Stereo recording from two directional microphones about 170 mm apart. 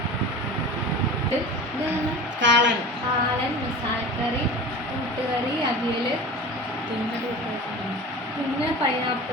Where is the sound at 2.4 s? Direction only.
90° right.